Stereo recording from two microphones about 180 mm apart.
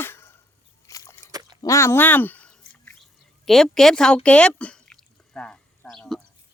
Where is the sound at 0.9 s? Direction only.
20° left (ahead or behind).